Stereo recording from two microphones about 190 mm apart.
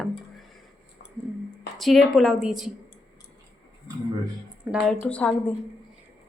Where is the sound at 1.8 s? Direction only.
Centre (ahead or behind).